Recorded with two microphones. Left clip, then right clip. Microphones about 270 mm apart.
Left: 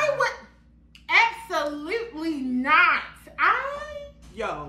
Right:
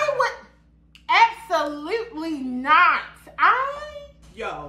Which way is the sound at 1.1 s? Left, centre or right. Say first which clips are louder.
Right 3 dB; centre.